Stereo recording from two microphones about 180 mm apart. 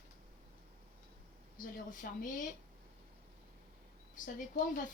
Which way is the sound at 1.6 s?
45° left (ahead or behind).